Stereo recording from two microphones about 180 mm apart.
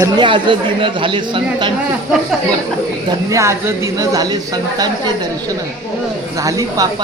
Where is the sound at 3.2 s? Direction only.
15° right (ahead or behind).